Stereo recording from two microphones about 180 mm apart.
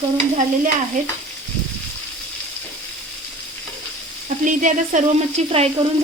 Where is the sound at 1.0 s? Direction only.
45° right (ahead or behind).